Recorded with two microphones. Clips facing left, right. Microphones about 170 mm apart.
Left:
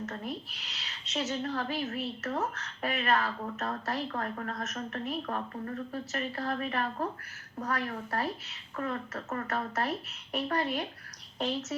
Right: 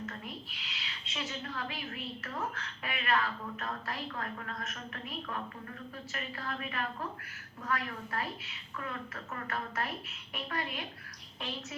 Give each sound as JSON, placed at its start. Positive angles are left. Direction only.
{"t": 0.0, "sound": "speech", "side_deg": 40}